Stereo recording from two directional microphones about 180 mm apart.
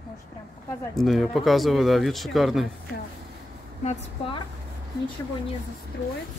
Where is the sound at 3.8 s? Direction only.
30° left (ahead or behind).